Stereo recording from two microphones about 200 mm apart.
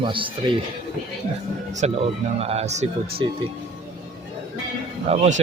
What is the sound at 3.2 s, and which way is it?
Speech, 25° right (ahead or behind).